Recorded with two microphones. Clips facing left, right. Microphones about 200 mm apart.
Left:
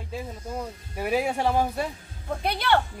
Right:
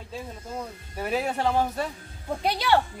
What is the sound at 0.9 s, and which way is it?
Speech, 10° left (ahead or behind).